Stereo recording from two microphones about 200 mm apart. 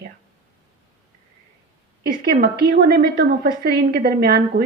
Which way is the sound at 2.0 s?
50° right (ahead or behind).